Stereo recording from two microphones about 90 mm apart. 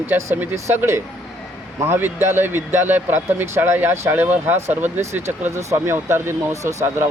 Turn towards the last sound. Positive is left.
turn(degrees=-30)  # may be behind; listen again after turning